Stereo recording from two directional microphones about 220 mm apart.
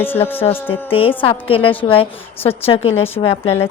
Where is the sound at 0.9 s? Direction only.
25° left (ahead or behind).